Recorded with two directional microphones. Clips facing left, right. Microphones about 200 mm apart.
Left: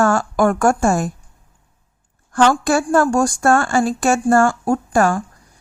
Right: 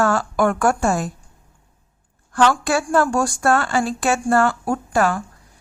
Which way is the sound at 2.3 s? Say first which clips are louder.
Left 3 dB; 45° left (ahead or behind).